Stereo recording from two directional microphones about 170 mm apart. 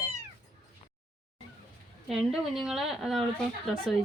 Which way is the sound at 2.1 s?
Centre (ahead or behind).